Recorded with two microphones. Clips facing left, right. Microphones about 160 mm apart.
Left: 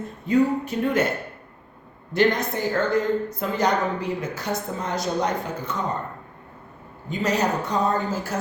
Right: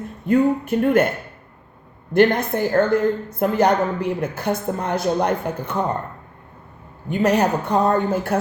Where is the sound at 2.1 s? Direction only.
55° right (ahead or behind).